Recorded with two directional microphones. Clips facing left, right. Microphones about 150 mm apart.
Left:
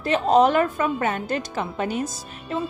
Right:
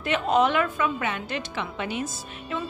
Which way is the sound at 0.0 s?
35° left (ahead or behind).